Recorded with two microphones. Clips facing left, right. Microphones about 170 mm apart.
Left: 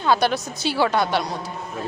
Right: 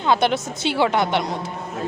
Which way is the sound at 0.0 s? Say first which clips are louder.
Right 1 dB; 20° right (ahead or behind).